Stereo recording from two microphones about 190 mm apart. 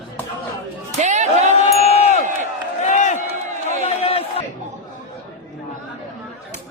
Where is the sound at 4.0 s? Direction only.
30° left (ahead or behind).